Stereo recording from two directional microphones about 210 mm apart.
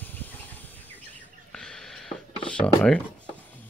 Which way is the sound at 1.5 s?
5° left (ahead or behind).